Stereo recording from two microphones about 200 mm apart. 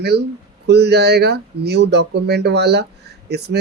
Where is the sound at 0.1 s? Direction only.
55° right (ahead or behind).